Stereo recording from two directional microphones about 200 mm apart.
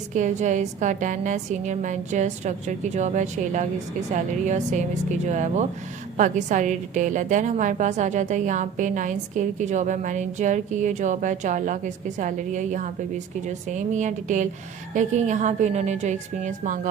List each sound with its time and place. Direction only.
0.1 s a woman's voice: 35° right (ahead or behind)